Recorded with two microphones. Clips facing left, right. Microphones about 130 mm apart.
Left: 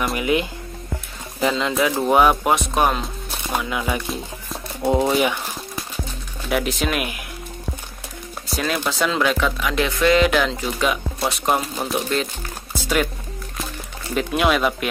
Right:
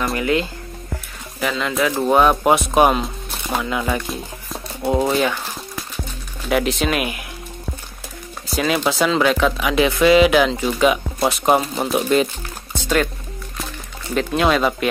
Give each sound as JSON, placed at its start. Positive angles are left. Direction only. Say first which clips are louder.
{"t": 0.1, "sound": "speech", "louder": "right 1 dB", "side_deg": 15}
{"t": 1.7, "sound": "speech", "louder": "right 4 dB", "side_deg": 5}
{"t": 2.4, "sound": "speech", "louder": "right 4 dB", "side_deg": -5}
{"t": 4.8, "sound": "speech", "louder": "even", "side_deg": 15}
{"t": 5.2, "sound": "a sound", "louder": "even", "side_deg": 10}
{"t": 6.5, "sound": "speech", "louder": "right 3 dB", "side_deg": 0}
{"t": 8.5, "sound": "speech", "louder": "right 4 dB", "side_deg": -5}
{"t": 12.7, "sound": "music", "louder": "right 2 dB", "side_deg": 10}
{"t": 14.1, "sound": "speech", "louder": "right 2 dB", "side_deg": 5}